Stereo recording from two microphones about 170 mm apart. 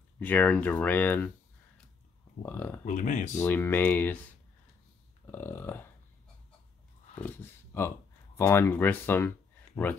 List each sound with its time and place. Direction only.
0.2 s speech: 10° left (ahead or behind)
2.4 s speech: 10° left (ahead or behind)
2.8 s speech: 50° left (ahead or behind)
3.3 s speech: 10° left (ahead or behind)
5.2 s speech: 15° left (ahead or behind)
7.2 s speech: 10° left (ahead or behind)